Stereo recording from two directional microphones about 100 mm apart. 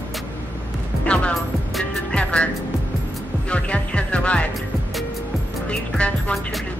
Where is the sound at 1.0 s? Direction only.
10° left (ahead or behind).